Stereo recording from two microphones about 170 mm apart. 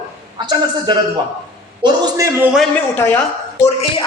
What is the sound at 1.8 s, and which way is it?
Speech, 20° right (ahead or behind).